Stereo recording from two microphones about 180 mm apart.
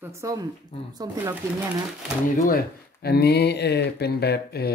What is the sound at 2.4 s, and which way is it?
Speech, 55° left (ahead or behind).